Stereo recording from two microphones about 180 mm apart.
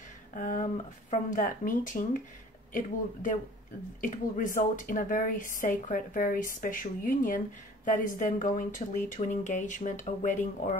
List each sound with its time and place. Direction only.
0.3 s a woman's voice: 45° left (ahead or behind)